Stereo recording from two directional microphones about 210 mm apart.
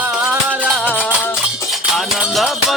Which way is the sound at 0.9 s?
5° left (ahead or behind).